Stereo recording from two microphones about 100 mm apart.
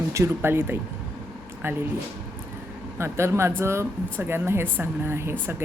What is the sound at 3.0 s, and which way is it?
Speech, 25° right (ahead or behind).